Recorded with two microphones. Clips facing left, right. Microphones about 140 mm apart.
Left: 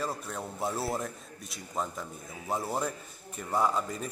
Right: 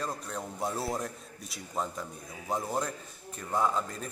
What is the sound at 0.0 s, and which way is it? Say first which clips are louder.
A man's voice: left 1 dB; 5° left (ahead or behind).